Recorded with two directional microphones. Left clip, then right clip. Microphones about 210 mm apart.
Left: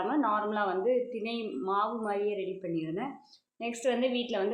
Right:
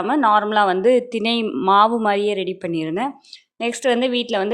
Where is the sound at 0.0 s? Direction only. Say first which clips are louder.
Right 13 dB; 50° right (ahead or behind).